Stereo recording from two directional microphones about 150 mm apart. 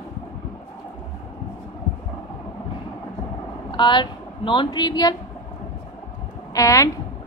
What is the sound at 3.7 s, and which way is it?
Speech, 30° left (ahead or behind).